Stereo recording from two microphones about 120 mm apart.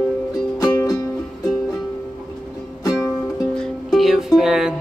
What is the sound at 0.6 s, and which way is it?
Music, 30° left (ahead or behind).